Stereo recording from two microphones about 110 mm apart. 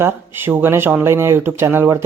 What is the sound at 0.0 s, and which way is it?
Speech, 20° right (ahead or behind).